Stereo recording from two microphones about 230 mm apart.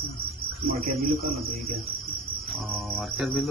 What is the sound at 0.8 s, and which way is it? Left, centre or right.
Speech, right.